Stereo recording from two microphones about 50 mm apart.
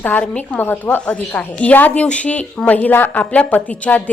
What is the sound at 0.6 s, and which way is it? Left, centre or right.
A woman's voice, left.